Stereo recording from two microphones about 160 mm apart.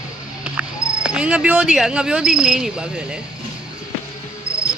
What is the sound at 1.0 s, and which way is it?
Speech, 5° right (ahead or behind).